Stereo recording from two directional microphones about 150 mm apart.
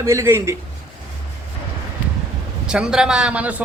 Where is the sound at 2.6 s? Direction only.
5° right (ahead or behind).